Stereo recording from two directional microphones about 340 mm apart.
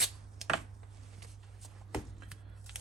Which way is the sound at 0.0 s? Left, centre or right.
Centre.